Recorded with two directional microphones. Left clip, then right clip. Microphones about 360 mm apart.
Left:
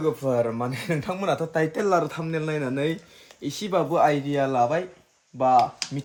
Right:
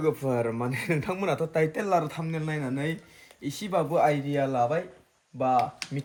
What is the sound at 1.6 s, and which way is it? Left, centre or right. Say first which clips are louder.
Speech: left 3 dB; left.